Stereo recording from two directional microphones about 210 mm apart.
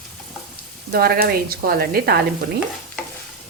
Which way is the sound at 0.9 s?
45° right (ahead or behind).